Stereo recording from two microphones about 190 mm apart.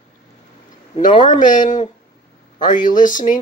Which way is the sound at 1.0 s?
40° left (ahead or behind).